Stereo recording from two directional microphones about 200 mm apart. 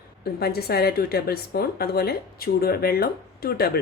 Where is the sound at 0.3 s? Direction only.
50° left (ahead or behind).